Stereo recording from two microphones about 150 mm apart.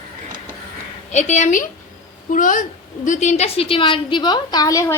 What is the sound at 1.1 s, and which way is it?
Speech, 50° left (ahead or behind).